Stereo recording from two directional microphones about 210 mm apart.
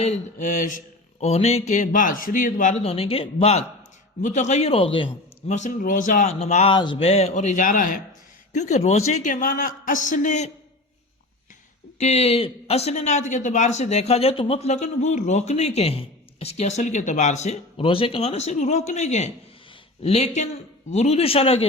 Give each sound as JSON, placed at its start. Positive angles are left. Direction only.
{"t": 0.0, "sound": "speech", "side_deg": 35}
{"t": 5.5, "sound": "speech", "side_deg": 40}
{"t": 11.9, "sound": "speech", "side_deg": 30}